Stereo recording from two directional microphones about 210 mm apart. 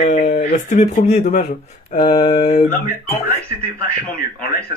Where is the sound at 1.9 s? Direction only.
40° left (ahead or behind).